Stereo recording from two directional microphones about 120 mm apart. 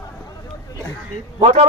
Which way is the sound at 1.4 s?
60° right (ahead or behind).